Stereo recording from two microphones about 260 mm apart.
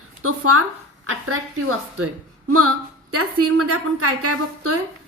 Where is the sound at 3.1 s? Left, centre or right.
Right.